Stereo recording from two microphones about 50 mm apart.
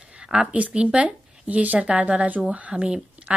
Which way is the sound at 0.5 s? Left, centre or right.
Right.